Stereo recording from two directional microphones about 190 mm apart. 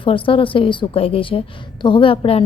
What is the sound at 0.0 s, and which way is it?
A woman's voice, 25° left (ahead or behind).